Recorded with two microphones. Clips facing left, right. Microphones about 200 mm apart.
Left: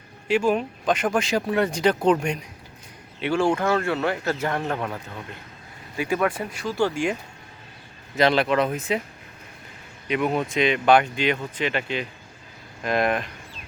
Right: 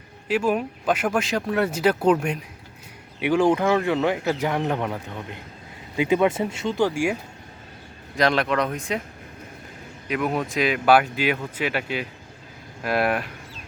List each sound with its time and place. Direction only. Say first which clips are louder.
0.3 s speech: left 1 dB; 5° right (ahead or behind)
3.2 s speech: right 3 dB; 15° right (ahead or behind)
8.1 s speech: left 2 dB; centre (ahead or behind)
10.1 s speech: left 1 dB; centre (ahead or behind)